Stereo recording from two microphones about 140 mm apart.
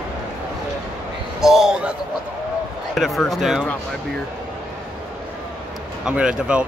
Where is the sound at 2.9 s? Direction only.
Centre (ahead or behind).